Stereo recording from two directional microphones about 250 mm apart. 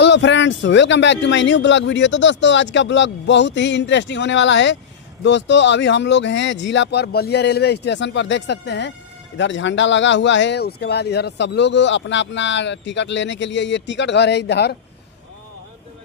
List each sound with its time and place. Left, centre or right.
0.0 s a man's voice: left